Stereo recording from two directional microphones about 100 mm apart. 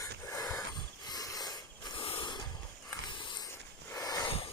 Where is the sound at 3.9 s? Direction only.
35° left (ahead or behind).